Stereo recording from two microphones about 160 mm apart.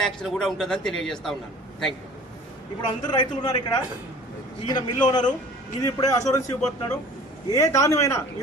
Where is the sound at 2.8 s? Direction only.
30° left (ahead or behind).